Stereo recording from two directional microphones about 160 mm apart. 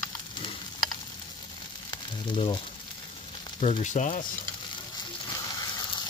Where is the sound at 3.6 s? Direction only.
45° left (ahead or behind).